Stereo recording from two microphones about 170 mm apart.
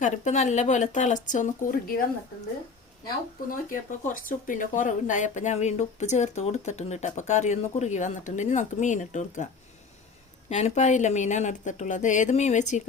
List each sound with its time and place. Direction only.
0.0 s speech: 45° left (ahead or behind)
3.5 s speech: 55° left (ahead or behind)
10.5 s speech: 40° left (ahead or behind)